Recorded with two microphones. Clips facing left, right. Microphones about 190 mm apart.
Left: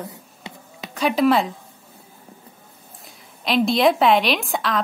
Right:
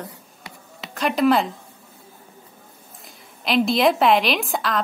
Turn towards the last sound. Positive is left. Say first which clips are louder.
# left 1 dB
turn(degrees=0)  # may be behind; listen again after turning